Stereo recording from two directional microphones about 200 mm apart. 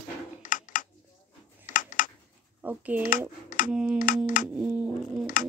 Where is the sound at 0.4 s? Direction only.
40° left (ahead or behind).